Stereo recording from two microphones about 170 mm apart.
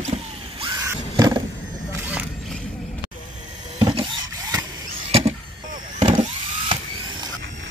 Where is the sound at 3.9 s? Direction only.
25° right (ahead or behind).